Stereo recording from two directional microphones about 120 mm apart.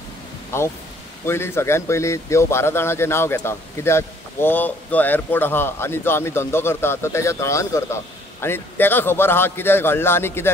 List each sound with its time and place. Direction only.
0.5 s a man's voice: 20° left (ahead or behind)